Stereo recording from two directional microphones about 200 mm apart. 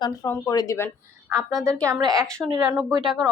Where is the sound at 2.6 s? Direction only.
10° right (ahead or behind).